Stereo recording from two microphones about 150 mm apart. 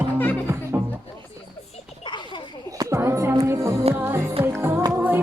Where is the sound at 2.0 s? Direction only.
30° left (ahead or behind).